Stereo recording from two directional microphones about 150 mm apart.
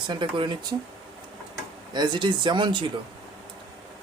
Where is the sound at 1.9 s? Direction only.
30° right (ahead or behind).